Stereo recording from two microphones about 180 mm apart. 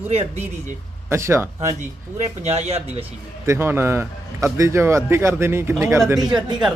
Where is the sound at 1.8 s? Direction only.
40° right (ahead or behind).